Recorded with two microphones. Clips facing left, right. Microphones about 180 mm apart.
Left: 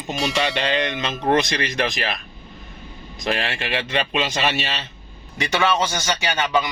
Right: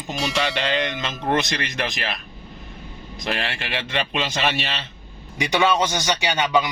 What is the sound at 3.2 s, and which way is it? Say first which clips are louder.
Speech: left 3 dB; 15° left (ahead or behind).